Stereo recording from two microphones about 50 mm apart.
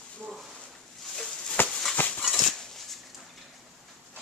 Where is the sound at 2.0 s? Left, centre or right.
Left.